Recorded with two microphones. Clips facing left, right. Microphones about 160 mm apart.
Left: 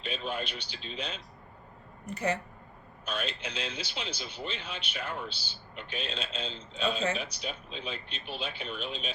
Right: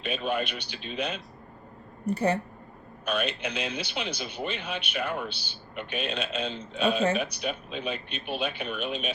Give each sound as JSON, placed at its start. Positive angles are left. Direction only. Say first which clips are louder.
{"t": 0.0, "sound": "a man's voice", "louder": "right 6 dB", "side_deg": -65}
{"t": 2.0, "sound": "a woman's voice", "louder": "right 6 dB", "side_deg": -35}
{"t": 3.0, "sound": "a man's voice", "louder": "right 6 dB", "side_deg": -65}